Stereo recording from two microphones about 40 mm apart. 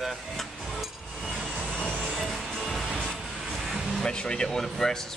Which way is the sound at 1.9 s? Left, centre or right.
Centre.